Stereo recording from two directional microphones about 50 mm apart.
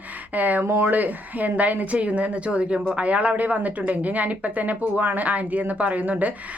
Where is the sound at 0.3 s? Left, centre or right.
Right.